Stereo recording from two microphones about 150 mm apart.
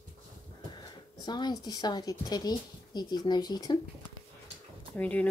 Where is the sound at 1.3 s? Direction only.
30° left (ahead or behind).